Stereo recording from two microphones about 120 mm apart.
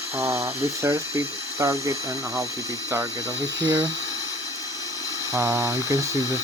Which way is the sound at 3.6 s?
35° right (ahead or behind).